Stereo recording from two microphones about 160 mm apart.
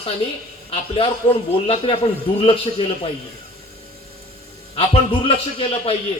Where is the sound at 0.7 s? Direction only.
35° left (ahead or behind).